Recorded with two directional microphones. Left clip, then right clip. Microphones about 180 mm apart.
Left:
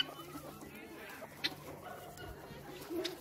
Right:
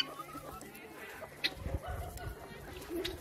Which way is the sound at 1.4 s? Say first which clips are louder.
Right 3 dB; 40° left (ahead or behind).